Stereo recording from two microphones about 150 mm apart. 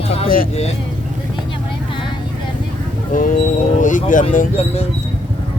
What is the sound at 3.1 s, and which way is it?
Speech, 65° left (ahead or behind).